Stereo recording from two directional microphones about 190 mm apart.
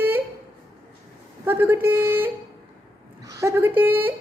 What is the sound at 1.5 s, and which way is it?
Speech, 10° right (ahead or behind).